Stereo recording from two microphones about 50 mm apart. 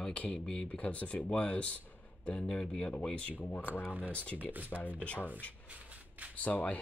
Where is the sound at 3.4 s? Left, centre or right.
Left.